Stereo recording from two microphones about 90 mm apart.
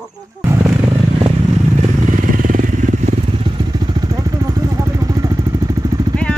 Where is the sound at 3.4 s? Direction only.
70° right (ahead or behind); by 6.1 s 45° right (ahead or behind).